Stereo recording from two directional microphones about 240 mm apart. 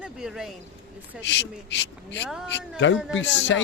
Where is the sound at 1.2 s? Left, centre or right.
Left.